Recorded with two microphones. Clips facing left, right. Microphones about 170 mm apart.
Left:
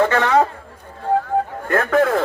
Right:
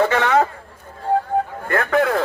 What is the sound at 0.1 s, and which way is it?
Speech, 5° right (ahead or behind).